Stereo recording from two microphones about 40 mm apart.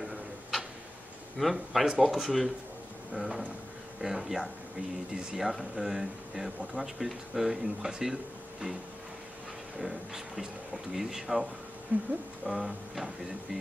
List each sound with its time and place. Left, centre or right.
0.0 s tick-tock: centre
1.4 s speech: centre
9.8 s speech: centre
11.9 s speech: right
12.4 s speech: centre